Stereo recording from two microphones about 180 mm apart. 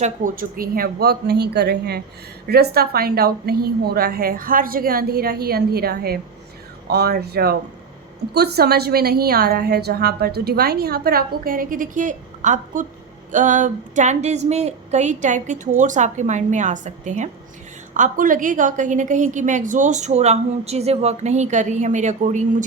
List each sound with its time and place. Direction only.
0.0 s a woman's voice: 50° right (ahead or behind)